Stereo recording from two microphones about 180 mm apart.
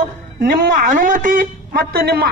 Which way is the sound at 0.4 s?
50° right (ahead or behind).